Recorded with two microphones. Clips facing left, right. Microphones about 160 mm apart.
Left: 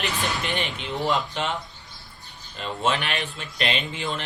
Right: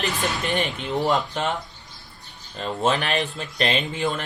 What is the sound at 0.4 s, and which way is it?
Speech, 40° right (ahead or behind).